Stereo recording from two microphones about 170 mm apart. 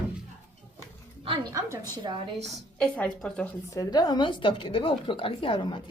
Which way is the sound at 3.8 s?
25° left (ahead or behind).